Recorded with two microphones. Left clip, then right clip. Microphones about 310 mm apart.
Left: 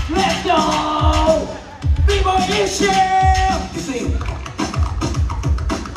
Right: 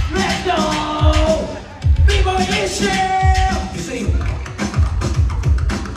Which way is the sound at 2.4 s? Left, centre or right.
Left.